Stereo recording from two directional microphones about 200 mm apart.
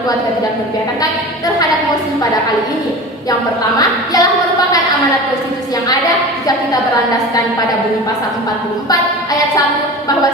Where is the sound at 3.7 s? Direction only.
20° left (ahead or behind).